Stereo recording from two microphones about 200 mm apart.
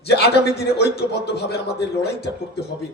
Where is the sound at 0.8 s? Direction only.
55° left (ahead or behind).